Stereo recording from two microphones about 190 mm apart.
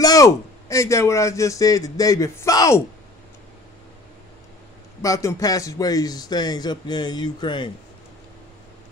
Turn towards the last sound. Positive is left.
turn(degrees=25)  # may be behind; listen again after turning